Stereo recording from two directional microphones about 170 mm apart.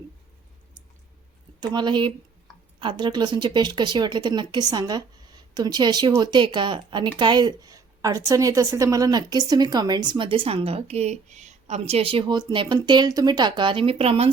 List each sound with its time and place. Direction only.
1.6 s a woman's voice: 25° right (ahead or behind)